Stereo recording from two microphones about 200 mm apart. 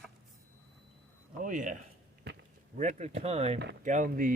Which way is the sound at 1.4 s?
40° right (ahead or behind).